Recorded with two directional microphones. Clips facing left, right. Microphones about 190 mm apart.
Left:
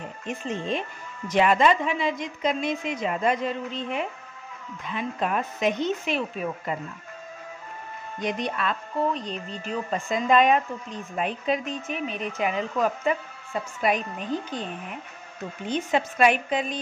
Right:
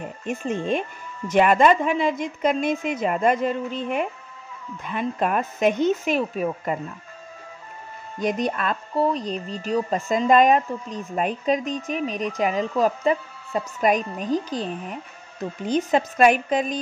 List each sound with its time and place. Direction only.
0.3 s a woman's voice: 50° right (ahead or behind)
8.2 s speech: 45° right (ahead or behind)